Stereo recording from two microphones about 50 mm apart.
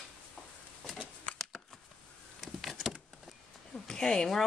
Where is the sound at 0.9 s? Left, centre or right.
Centre.